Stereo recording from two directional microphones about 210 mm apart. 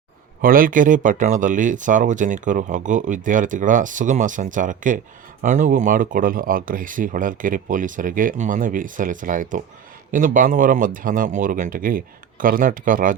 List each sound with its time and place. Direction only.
0.4 s speech: 40° right (ahead or behind)